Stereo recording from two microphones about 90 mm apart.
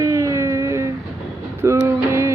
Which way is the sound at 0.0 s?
35° right (ahead or behind).